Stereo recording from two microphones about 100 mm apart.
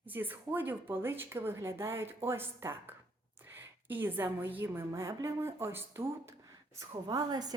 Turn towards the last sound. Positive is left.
turn(degrees=-40)  # may be behind; listen again after turning